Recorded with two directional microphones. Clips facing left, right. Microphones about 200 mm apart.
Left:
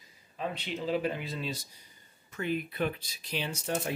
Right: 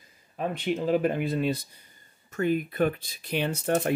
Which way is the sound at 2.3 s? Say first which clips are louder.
Right 7 dB; 50° right (ahead or behind).